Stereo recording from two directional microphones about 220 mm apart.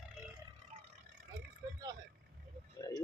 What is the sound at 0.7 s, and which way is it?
Vehicle, 30° right (ahead or behind).